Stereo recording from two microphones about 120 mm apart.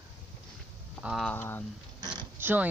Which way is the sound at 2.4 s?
15° right (ahead or behind).